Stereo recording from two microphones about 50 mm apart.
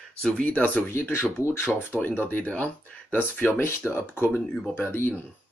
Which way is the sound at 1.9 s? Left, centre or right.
Left.